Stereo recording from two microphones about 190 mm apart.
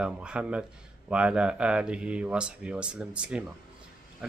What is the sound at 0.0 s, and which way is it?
Speech, 5° right (ahead or behind).